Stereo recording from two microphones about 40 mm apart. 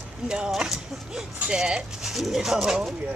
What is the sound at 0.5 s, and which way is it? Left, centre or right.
Speech, centre.